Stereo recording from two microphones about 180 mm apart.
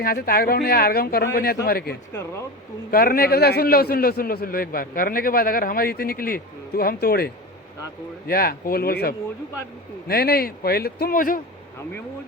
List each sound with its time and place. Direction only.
0.0 s a man's voice: 55° left (ahead or behind)
8.3 s a man's voice: 55° left (ahead or behind)